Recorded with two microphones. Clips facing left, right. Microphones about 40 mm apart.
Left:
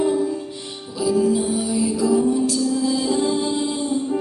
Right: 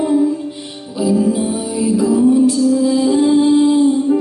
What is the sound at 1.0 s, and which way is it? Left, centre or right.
Music, right.